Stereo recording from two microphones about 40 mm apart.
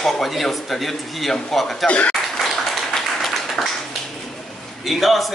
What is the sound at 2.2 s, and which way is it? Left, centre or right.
Clapping, centre.